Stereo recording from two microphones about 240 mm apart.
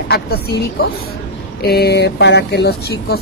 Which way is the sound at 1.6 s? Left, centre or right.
Left.